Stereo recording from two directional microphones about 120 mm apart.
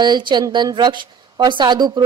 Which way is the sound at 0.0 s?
40° right (ahead or behind).